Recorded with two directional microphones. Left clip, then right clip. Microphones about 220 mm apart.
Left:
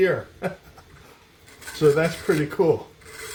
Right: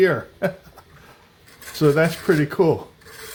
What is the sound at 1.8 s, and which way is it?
Speech, 45° right (ahead or behind).